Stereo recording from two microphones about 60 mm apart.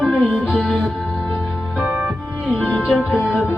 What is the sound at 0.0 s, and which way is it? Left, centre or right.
Music, centre.